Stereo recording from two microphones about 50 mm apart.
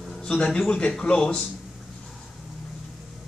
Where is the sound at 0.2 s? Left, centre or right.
Left.